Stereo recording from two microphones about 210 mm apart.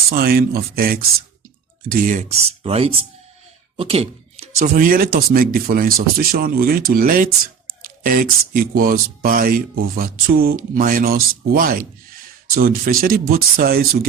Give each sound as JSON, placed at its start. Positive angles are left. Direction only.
{"t": 0.1, "sound": "speech", "side_deg": -45}
{"t": 4.6, "sound": "speech", "side_deg": -40}